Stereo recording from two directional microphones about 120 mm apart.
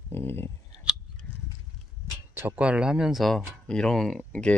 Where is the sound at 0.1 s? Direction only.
20° left (ahead or behind).